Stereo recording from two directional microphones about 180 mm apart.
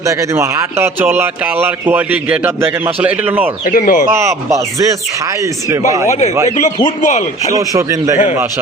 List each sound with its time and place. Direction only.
0.0 s a man's voice: 15° right (ahead or behind)
3.7 s speech: 50° left (ahead or behind)
4.1 s a man's voice: 15° right (ahead or behind)
6.1 s speech: 40° left (ahead or behind)
7.5 s a man's voice: 15° right (ahead or behind)